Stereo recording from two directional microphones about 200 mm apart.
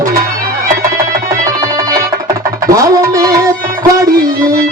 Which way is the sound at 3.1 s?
15° right (ahead or behind).